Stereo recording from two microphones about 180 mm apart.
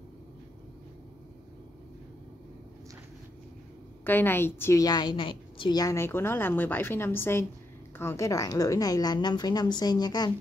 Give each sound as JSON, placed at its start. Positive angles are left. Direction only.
{"t": 4.0, "sound": "a woman's voice", "side_deg": 10}